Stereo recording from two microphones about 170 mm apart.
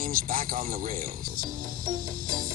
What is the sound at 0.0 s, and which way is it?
Speech, 55° right (ahead or behind).